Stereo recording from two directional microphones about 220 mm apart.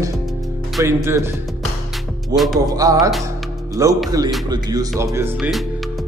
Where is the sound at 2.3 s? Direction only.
Centre (ahead or behind).